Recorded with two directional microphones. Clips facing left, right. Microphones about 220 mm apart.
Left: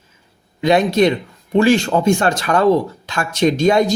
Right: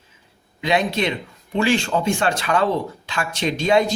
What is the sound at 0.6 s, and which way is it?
Speech, 45° left (ahead or behind).